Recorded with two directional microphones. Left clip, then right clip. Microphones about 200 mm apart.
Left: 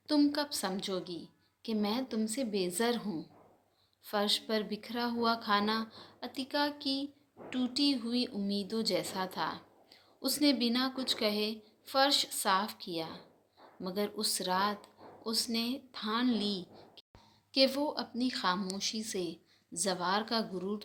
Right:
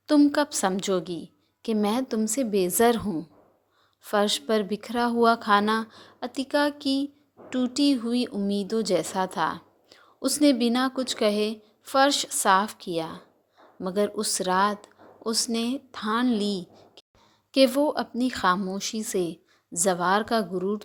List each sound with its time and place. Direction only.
0.1 s speech: 40° right (ahead or behind)